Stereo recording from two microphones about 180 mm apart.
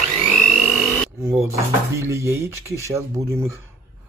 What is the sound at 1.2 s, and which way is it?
Speech, 15° right (ahead or behind).